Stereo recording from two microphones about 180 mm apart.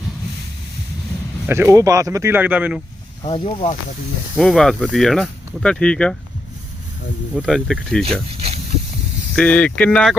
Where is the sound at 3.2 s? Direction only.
30° left (ahead or behind).